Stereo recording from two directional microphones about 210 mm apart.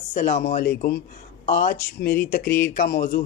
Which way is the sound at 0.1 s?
35° left (ahead or behind).